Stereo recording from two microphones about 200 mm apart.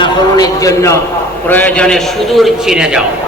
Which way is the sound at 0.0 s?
20° left (ahead or behind).